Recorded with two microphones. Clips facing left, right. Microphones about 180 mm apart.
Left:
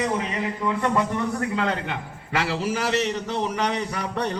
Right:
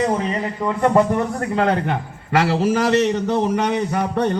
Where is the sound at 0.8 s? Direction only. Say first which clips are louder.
Right 10 dB; 45° right (ahead or behind).